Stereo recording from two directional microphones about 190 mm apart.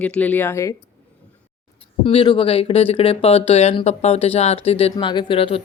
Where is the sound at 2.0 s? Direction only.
25° left (ahead or behind).